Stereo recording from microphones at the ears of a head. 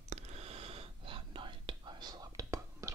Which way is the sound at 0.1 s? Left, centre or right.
Right.